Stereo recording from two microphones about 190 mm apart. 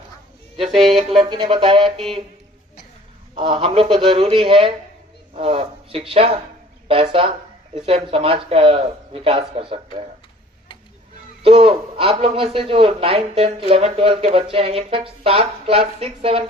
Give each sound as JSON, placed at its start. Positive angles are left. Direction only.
{"t": 1.2, "sound": "a man's voice", "side_deg": -25}
{"t": 3.3, "sound": "a man's voice", "side_deg": -25}
{"t": 6.8, "sound": "a sound", "side_deg": -30}
{"t": 7.9, "sound": "a man's voice", "side_deg": -30}
{"t": 11.4, "sound": "a man's voice", "side_deg": -30}